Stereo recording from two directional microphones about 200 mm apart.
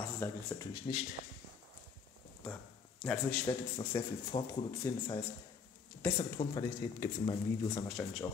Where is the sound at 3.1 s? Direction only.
5° left (ahead or behind).